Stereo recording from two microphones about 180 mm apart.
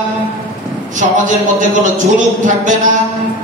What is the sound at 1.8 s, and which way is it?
Speech, 45° right (ahead or behind).